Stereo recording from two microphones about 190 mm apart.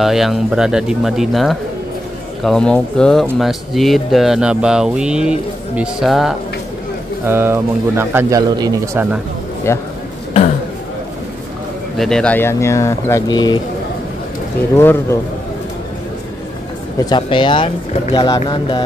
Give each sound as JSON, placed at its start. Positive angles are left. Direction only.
{"t": 0.0, "sound": "speech", "side_deg": 0}
{"t": 7.2, "sound": "speech", "side_deg": -10}
{"t": 9.7, "sound": "speech", "side_deg": 15}
{"t": 12.0, "sound": "speech", "side_deg": 5}
{"t": 14.8, "sound": "speech", "side_deg": 10}
{"t": 17.0, "sound": "speech", "side_deg": 25}